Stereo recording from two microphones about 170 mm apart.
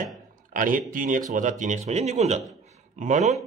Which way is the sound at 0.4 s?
50° right (ahead or behind).